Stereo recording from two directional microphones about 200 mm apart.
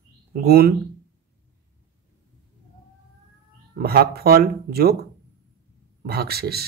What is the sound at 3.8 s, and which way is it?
Speech, 50° right (ahead or behind).